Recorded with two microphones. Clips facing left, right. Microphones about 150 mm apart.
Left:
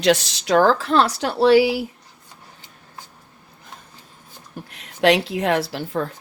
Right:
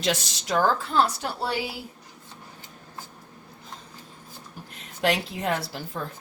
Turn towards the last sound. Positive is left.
turn(degrees=85)